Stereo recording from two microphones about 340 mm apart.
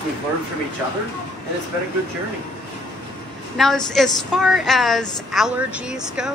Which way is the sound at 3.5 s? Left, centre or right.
Centre.